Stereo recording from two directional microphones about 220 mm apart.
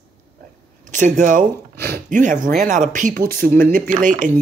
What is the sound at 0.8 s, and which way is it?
Speech, 35° right (ahead or behind).